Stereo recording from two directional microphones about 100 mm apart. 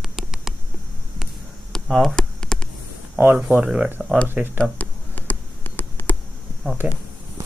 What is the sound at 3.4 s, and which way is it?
Speech, 10° right (ahead or behind).